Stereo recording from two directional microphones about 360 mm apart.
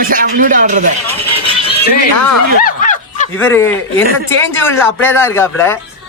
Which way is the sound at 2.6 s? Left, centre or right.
Left.